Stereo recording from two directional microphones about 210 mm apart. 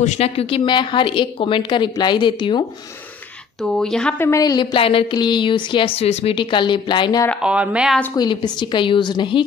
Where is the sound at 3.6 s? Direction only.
5° left (ahead or behind); by 7.2 s 20° left (ahead or behind).